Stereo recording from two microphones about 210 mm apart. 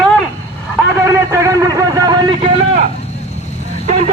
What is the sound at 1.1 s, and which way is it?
Vehicle, 15° right (ahead or behind).